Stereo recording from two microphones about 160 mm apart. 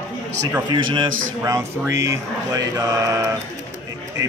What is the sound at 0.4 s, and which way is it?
Speech, 20° right (ahead or behind).